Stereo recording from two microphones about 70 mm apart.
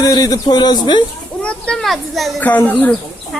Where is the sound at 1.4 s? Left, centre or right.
Centre.